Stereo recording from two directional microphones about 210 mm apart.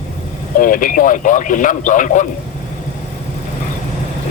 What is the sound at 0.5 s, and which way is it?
Speech, 40° left (ahead or behind).